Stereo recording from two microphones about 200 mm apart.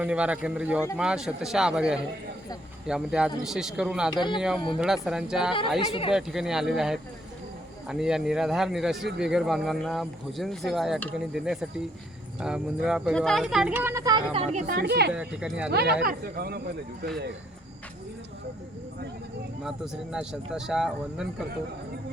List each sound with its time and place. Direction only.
0.0 s speech: 5° right (ahead or behind)
4.1 s speech: 20° left (ahead or behind)
4.4 s speech: centre (ahead or behind)
5.8 s speech: 25° left (ahead or behind)
6.1 s speech: centre (ahead or behind); by 14.3 s 20° right (ahead or behind)
14.3 s speech: 30° right (ahead or behind)
14.7 s speech: 55° right (ahead or behind)
15.1 s speech: 5° right (ahead or behind)
16.0 s speech: 50° right (ahead or behind)
19.6 s speech: 5° right (ahead or behind)